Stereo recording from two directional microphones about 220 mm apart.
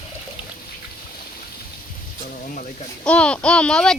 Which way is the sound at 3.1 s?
5° left (ahead or behind).